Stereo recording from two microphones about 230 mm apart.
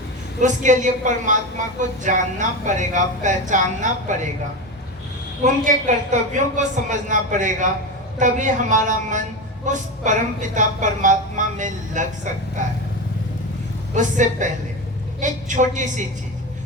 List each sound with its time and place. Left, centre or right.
0.4 s a woman's voice: right
5.4 s a woman's voice: right
13.9 s a woman's voice: right